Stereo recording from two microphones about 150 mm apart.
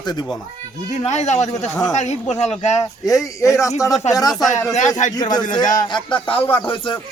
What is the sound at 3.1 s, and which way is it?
A man's voice, 20° left (ahead or behind).